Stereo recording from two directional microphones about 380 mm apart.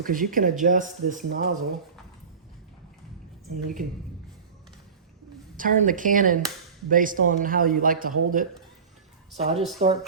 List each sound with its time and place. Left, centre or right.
0.0 s speech: right
5.5 s speech: right